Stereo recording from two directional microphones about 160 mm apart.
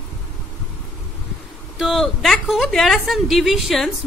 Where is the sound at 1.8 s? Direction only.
Centre (ahead or behind).